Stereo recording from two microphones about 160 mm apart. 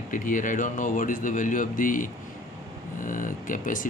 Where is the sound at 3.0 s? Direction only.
55° left (ahead or behind).